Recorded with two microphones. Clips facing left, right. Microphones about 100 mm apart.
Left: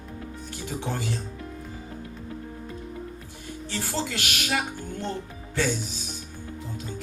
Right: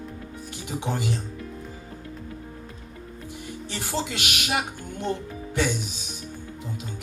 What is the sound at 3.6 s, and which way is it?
Speech, 20° right (ahead or behind).